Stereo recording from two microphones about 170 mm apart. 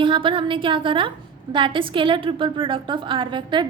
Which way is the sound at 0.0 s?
30° right (ahead or behind).